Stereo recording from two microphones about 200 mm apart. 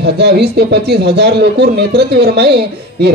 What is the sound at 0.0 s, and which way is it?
Speech, 55° right (ahead or behind).